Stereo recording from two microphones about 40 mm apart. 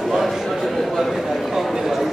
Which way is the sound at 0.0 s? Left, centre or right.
Centre.